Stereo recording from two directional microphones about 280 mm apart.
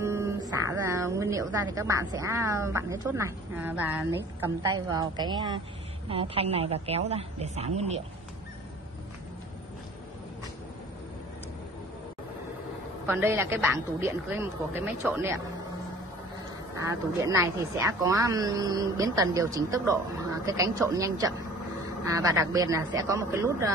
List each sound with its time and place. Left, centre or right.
0.0 s a woman's voice: centre
13.0 s a woman's voice: centre
16.9 s a woman's voice: centre